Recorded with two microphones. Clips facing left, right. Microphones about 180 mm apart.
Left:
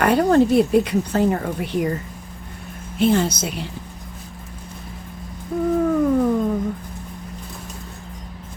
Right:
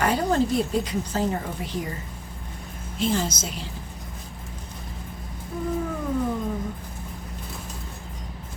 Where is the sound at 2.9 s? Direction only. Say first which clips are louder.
Left 7 dB; 60° left (ahead or behind).